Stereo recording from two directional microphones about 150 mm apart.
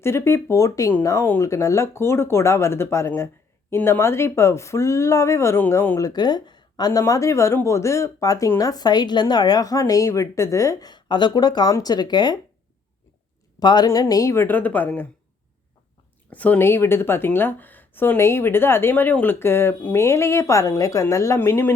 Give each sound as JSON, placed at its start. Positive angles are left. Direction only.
{"t": 0.0, "sound": "speech", "side_deg": 15}
{"t": 6.1, "sound": "speech", "side_deg": 30}
{"t": 13.6, "sound": "speech", "side_deg": 30}
{"t": 16.3, "sound": "speech", "side_deg": 10}